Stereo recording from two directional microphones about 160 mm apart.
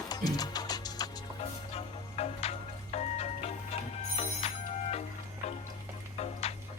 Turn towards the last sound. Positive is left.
turn(degrees=40)  # may be behind; listen again after turning